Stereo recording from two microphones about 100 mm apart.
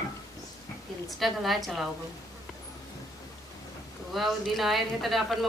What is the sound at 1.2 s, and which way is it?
Speech, centre (ahead or behind).